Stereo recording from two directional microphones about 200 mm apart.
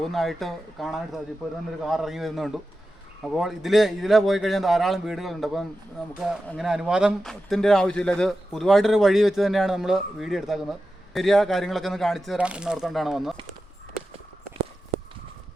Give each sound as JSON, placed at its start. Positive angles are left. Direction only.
{"t": 0.0, "sound": "speech", "side_deg": 0}